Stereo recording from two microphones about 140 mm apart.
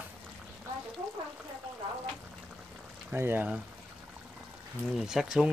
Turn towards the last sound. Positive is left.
turn(degrees=-5)  # may be behind; listen again after turning